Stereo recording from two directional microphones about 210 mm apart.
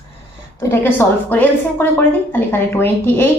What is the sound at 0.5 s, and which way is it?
Speech, 10° left (ahead or behind).